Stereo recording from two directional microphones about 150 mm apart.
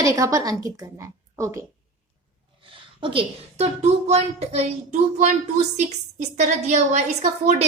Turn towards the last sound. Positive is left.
turn(degrees=-50)  # may be behind; listen again after turning